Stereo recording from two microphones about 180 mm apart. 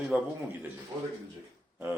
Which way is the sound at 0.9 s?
20° right (ahead or behind).